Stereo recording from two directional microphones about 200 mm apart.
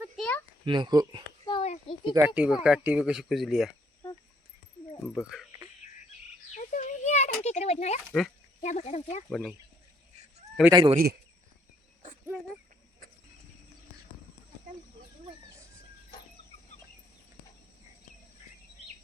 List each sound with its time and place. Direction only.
0.2 s a sound: 10° left (ahead or behind)
0.6 s a child's voice: 25° right (ahead or behind)
1.5 s a sound: 25° left (ahead or behind)
2.1 s speech: 10° right (ahead or behind)
6.5 s a sound: 40° left (ahead or behind)
8.1 s speech: centre (ahead or behind)
8.6 s speech: 35° left (ahead or behind)
9.3 s speech: centre (ahead or behind)
10.7 s a child's voice: 25° right (ahead or behind)